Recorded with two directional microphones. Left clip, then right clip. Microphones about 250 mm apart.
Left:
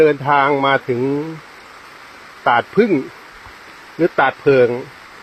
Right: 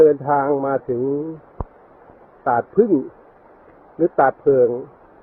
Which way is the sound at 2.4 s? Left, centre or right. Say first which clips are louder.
Left 4 dB; left.